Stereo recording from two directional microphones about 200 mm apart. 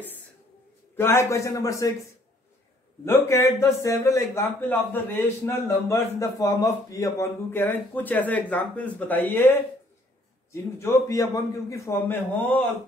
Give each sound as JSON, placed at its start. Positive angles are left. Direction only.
{"t": 0.9, "sound": "a man's voice", "side_deg": 10}
{"t": 3.1, "sound": "a man's voice", "side_deg": 15}